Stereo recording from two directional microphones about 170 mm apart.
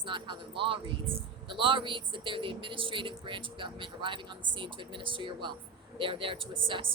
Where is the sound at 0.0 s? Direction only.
30° right (ahead or behind).